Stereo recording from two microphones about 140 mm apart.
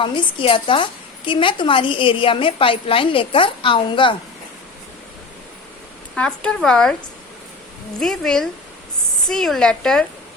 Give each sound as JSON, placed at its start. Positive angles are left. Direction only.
{"t": 0.0, "sound": "a woman's voice", "side_deg": 35}
{"t": 6.1, "sound": "speech", "side_deg": 5}
{"t": 7.9, "sound": "speech", "side_deg": 5}